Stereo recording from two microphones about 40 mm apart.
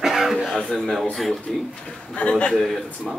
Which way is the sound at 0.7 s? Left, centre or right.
Centre.